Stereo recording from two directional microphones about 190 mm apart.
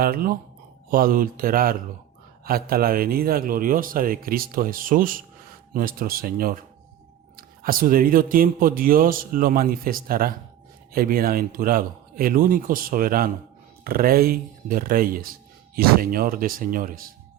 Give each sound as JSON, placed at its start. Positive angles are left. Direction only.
{"t": 0.0, "sound": "speech", "side_deg": -50}